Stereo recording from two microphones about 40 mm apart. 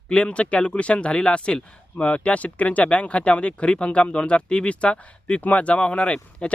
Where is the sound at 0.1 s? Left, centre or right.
Left.